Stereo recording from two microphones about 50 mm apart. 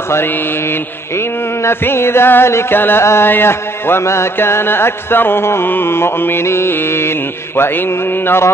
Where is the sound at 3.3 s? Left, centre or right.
Left.